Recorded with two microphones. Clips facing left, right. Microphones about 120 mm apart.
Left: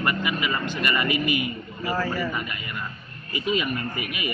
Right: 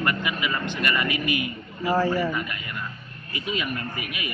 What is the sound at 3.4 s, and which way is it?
Speech, centre (ahead or behind).